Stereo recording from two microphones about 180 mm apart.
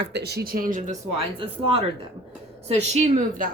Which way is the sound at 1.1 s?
30° right (ahead or behind).